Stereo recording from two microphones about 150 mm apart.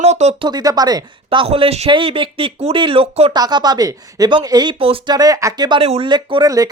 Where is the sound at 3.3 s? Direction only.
25° right (ahead or behind).